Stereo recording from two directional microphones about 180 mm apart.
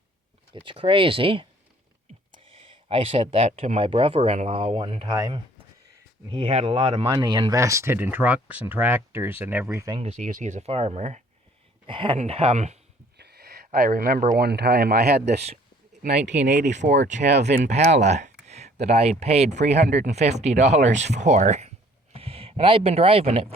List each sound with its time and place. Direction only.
0.5 s speech: 30° right (ahead or behind)
6.2 s speech: 30° right (ahead or behind)
10.0 s speech: 40° right (ahead or behind)
13.1 s a sound: 65° right (ahead or behind)
13.7 s speech: 50° right (ahead or behind)
14.3 s speech: 65° right (ahead or behind)
16.6 s speech: 40° right (ahead or behind)
17.2 s speech: 70° right (ahead or behind)
17.6 s speech: 40° right (ahead or behind)